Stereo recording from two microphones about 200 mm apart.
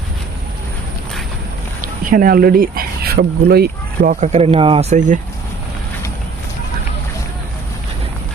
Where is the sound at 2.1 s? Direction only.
45° right (ahead or behind).